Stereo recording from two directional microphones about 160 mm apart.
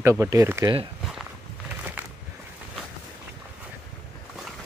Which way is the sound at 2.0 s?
10° right (ahead or behind).